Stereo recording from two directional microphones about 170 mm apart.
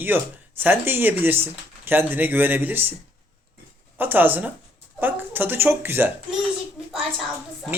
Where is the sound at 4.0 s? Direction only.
10° right (ahead or behind).